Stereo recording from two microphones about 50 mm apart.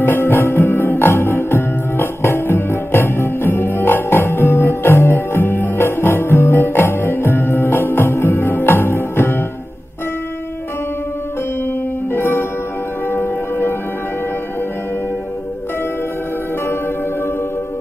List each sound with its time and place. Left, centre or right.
0.0 s music: left
12.1 s music: left